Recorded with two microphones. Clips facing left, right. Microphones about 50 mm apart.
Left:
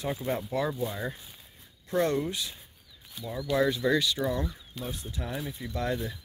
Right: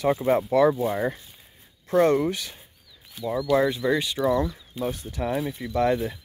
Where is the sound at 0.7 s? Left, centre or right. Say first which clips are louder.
Right 9 dB; right.